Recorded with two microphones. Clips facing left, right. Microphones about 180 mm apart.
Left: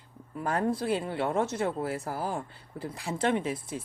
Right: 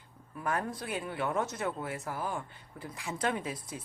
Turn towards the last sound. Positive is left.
turn(degrees=25)  # may be behind; listen again after turning